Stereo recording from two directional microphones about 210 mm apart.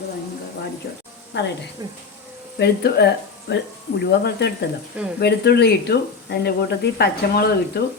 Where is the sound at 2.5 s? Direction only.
50° left (ahead or behind).